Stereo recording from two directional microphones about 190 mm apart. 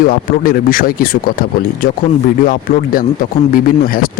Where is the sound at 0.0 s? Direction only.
50° left (ahead or behind).